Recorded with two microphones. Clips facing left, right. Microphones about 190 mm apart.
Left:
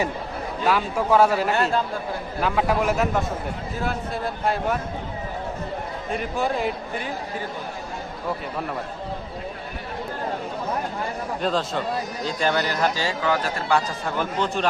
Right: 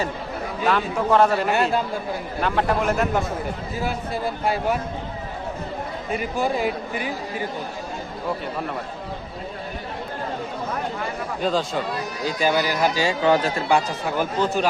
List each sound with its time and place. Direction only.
0.6 s a man's voice: 5° left (ahead or behind)
1.5 s speech: 10° right (ahead or behind)
2.4 s a man's voice: 5° left (ahead or behind)
6.1 s a man's voice: centre (ahead or behind)
11.3 s a man's voice: centre (ahead or behind)
13.2 s speech: 25° right (ahead or behind); by 14.7 s 5° right (ahead or behind)